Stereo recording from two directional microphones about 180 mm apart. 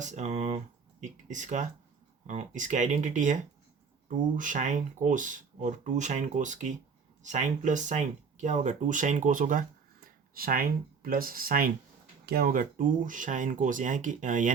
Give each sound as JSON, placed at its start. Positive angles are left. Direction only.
{"t": 0.0, "sound": "speech", "side_deg": -40}
{"t": 4.4, "sound": "speech", "side_deg": -45}